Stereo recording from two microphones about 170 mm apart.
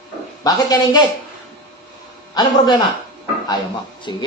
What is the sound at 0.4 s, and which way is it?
Speech, 25° left (ahead or behind).